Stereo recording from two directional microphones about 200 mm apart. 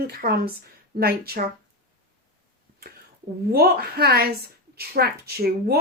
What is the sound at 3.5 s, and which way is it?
Speech, 50° right (ahead or behind).